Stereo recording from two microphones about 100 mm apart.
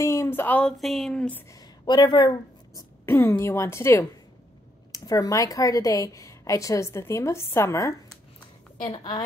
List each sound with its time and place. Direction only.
0.0 s speech: 30° left (ahead or behind)
0.7 s speech: centre (ahead or behind)
1.5 s a sound: 40° left (ahead or behind)
3.1 s a woman's voice: 25° left (ahead or behind)
4.9 s a woman's voice: 40° left (ahead or behind)
8.8 s a woman's voice: 45° left (ahead or behind)